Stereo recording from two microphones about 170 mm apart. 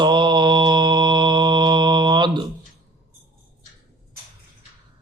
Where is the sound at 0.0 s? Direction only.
25° right (ahead or behind).